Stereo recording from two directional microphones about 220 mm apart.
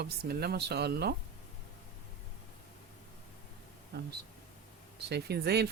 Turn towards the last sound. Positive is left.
turn(degrees=-45)  # may be behind; listen again after turning